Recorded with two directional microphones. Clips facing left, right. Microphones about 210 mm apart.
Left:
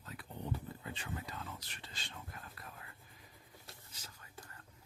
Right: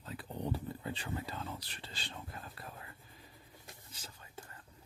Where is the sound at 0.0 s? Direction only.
30° right (ahead or behind).